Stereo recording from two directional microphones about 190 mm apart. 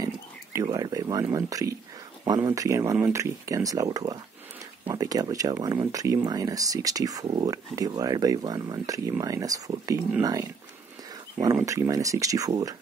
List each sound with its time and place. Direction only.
0.0 s speech: 15° right (ahead or behind)
11.5 s speech: 15° right (ahead or behind)